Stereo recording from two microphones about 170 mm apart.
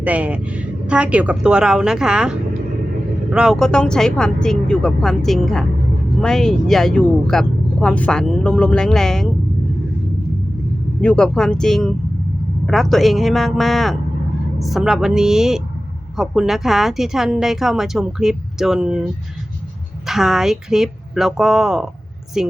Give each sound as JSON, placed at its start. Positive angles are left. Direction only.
{"t": 0.0, "sound": "speech", "side_deg": -10}
{"t": 11.0, "sound": "speech", "side_deg": 5}
{"t": 20.1, "sound": "speech", "side_deg": 0}